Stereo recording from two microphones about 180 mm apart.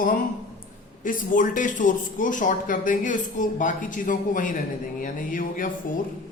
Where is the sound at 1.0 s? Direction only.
50° left (ahead or behind).